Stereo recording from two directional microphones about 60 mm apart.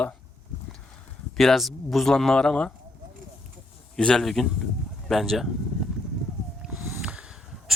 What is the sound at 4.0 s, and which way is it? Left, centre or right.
Speech, centre.